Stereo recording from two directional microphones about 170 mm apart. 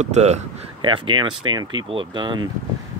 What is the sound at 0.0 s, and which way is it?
Speech, 40° right (ahead or behind).